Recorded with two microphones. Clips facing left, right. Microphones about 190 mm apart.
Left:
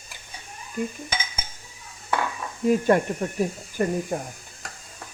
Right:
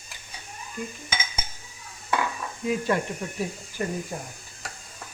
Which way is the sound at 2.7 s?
50° left (ahead or behind).